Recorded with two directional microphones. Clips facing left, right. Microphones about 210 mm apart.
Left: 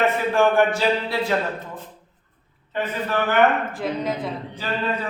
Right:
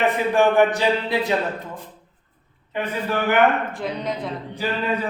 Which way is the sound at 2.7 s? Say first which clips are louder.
Even; 10° right (ahead or behind).